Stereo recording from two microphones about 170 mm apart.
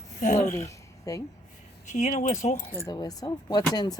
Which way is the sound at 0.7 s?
20° left (ahead or behind).